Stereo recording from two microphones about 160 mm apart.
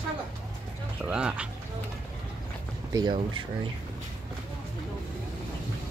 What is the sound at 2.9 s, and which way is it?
Speech, 30° right (ahead or behind).